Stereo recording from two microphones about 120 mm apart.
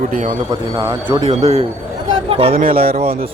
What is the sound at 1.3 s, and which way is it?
Speech, 60° right (ahead or behind).